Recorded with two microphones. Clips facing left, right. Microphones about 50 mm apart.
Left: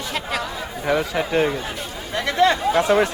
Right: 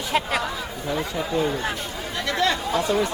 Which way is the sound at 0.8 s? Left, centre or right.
Left.